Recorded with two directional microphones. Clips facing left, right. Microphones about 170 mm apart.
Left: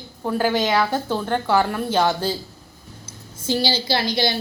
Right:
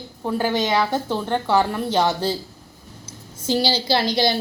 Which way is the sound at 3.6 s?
40° right (ahead or behind).